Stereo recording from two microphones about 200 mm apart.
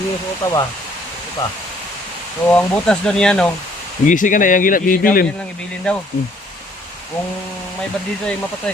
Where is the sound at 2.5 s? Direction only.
5° left (ahead or behind).